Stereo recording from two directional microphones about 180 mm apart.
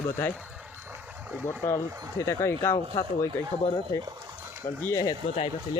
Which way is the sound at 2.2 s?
15° left (ahead or behind).